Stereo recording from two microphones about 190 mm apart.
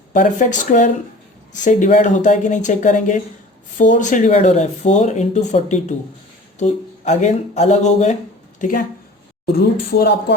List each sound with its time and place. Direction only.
0.1 s speech: 40° left (ahead or behind)
9.5 s speech: 55° left (ahead or behind)